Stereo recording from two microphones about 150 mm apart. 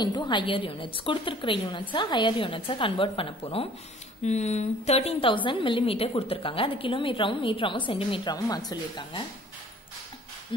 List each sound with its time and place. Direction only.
0.0 s a woman's voice: 30° left (ahead or behind)
4.2 s a woman's voice: 50° left (ahead or behind); by 9.2 s 30° left (ahead or behind)